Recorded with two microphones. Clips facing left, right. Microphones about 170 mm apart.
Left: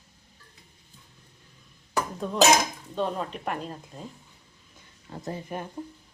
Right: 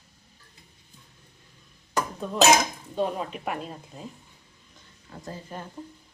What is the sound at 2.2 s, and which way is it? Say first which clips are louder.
Speech: right 1 dB; centre (ahead or behind).